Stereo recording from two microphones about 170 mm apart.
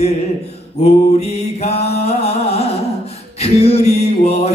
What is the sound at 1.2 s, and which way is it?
Mantra, 40° left (ahead or behind).